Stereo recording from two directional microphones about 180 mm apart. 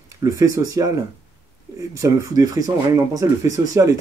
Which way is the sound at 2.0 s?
20° right (ahead or behind).